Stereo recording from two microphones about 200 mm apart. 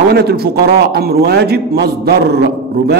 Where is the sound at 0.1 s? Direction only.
55° right (ahead or behind).